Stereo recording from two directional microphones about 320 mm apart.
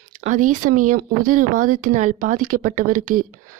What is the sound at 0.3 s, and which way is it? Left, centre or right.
Speech, right.